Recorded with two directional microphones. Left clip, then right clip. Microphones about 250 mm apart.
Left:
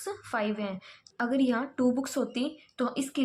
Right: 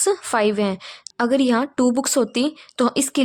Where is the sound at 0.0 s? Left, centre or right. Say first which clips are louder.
Right 13 dB; right.